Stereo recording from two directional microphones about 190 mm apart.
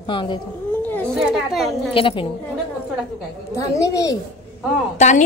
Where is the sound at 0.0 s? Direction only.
25° left (ahead or behind).